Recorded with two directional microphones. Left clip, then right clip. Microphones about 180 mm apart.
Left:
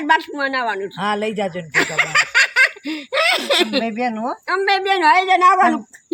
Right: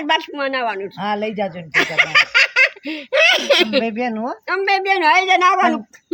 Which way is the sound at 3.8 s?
35° right (ahead or behind).